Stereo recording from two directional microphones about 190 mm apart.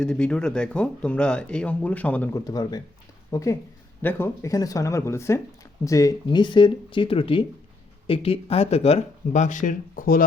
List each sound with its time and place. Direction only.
0.0 s speech: 5° left (ahead or behind)
2.5 s speech: 20° left (ahead or behind); by 10.2 s 45° left (ahead or behind)